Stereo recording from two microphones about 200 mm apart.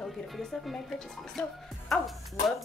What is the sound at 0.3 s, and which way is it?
A woman's voice, centre (ahead or behind).